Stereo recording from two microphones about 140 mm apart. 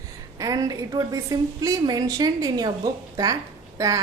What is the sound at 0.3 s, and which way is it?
A woman's voice, 25° right (ahead or behind).